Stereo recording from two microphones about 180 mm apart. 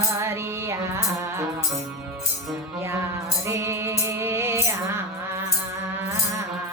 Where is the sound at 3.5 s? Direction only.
15° right (ahead or behind).